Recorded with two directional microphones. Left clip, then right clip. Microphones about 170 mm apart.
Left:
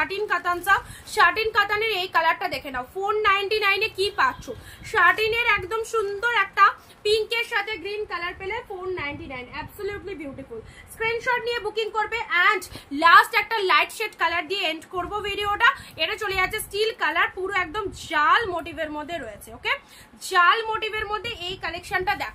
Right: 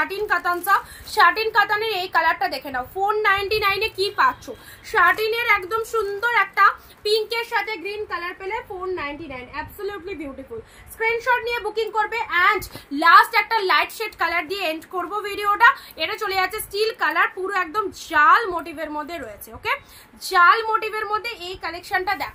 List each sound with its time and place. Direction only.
0.0 s a woman's voice: 15° left (ahead or behind)
11.0 s a woman's voice: 15° left (ahead or behind)